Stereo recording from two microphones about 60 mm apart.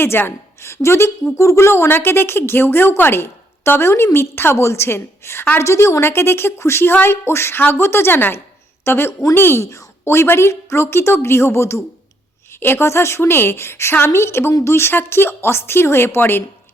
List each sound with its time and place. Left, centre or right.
0.0 s a woman's voice: left
5.6 s a woman's voice: left
12.5 s a woman's voice: left
12.8 s a woman's voice: left